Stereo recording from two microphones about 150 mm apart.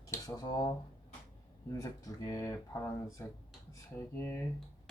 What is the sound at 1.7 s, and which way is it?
Speech, 25° left (ahead or behind).